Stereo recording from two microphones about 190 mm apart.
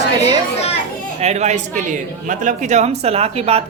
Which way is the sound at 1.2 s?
35° right (ahead or behind).